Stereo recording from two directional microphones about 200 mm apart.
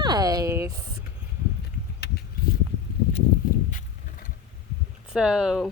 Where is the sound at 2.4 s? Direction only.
45° left (ahead or behind).